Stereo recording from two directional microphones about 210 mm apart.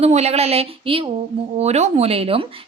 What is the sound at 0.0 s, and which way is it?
Speech, 30° right (ahead or behind).